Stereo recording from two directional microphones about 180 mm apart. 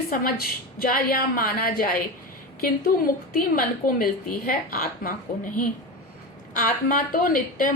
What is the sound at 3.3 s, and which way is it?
A woman's voice, 50° left (ahead or behind).